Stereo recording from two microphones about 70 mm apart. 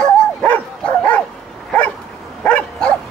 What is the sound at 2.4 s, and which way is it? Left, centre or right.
Dog, centre.